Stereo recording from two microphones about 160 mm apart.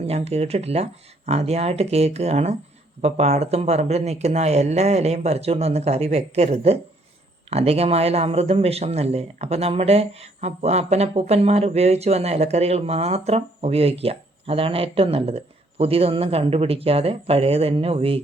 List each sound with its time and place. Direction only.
0.0 s speech: 40° right (ahead or behind)